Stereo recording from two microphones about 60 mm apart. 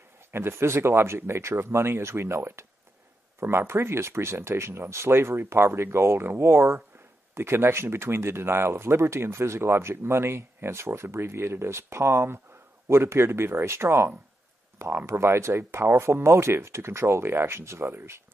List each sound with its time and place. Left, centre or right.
0.3 s speech: right